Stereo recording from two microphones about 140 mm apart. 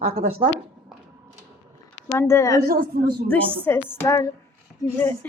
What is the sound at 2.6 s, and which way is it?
Speech, 90° right.